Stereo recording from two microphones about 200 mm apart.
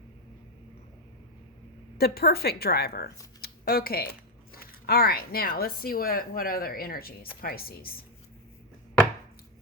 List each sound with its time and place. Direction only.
2.0 s speech: 50° left (ahead or behind)
3.4 s a sound: 50° left (ahead or behind)
4.5 s speech: 50° left (ahead or behind)